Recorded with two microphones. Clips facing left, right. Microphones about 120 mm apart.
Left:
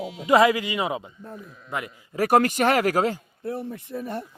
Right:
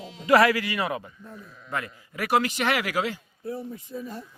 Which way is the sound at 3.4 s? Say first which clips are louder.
Left 3 dB; 65° left (ahead or behind).